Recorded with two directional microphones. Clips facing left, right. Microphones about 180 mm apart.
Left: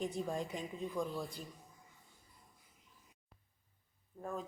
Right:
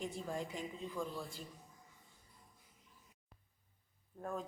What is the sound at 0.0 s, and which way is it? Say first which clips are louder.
Speech: left 3 dB; 20° left (ahead or behind).